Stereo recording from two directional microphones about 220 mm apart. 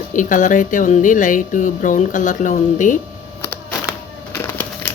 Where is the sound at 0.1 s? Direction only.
35° left (ahead or behind).